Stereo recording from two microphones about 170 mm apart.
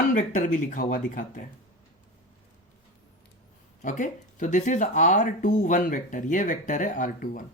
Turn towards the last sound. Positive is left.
turn(degrees=50)  # may be behind; listen again after turning